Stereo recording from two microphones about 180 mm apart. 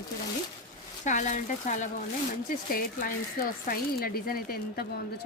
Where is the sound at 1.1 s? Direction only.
45° left (ahead or behind).